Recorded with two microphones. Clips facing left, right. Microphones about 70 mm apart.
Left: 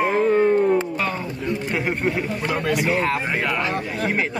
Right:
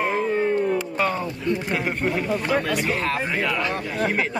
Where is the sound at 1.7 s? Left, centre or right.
Centre.